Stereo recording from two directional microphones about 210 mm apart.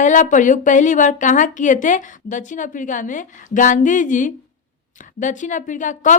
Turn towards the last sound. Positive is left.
turn(degrees=35)  # may be behind; listen again after turning